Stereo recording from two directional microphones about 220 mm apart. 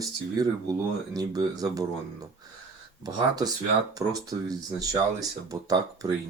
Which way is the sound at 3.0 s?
15° right (ahead or behind).